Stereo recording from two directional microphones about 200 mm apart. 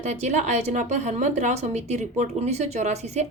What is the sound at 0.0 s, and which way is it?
A woman's voice, 35° right (ahead or behind).